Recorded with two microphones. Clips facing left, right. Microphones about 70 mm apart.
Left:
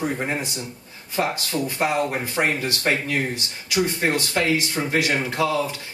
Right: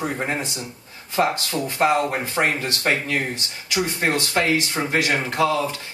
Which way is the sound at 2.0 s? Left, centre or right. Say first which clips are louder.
Right 1 dB; centre.